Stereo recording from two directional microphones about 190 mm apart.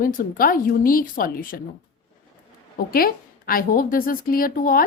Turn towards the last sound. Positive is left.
turn(degrees=50)  # may be behind; listen again after turning